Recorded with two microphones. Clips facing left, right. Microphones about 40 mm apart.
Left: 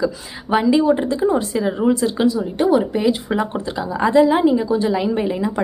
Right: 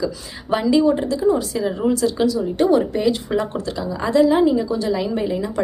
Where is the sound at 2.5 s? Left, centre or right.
Centre.